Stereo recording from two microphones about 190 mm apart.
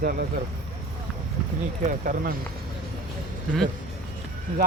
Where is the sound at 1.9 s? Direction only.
50° right (ahead or behind).